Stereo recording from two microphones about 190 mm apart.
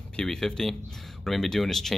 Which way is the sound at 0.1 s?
5° left (ahead or behind).